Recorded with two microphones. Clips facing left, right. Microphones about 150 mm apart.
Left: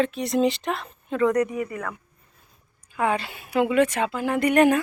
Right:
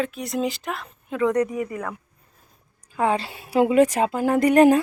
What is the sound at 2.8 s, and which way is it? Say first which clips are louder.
A woman's voice: right 2 dB; 35° right (ahead or behind).